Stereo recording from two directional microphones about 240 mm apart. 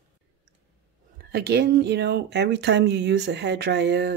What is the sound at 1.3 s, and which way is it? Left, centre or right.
Speech, right.